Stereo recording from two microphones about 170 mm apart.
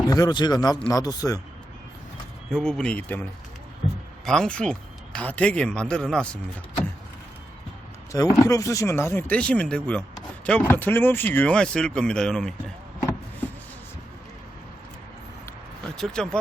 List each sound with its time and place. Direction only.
0.1 s speech: 25° left (ahead or behind)
2.5 s speech: 5° left (ahead or behind)
4.3 s speech: 5° left (ahead or behind)
8.1 s speech: 20° left (ahead or behind); by 12.7 s 5° left (ahead or behind)
16.0 s speech: 5° left (ahead or behind)